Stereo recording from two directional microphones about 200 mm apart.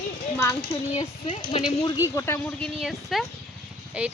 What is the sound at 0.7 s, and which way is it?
Speech, 30° left (ahead or behind).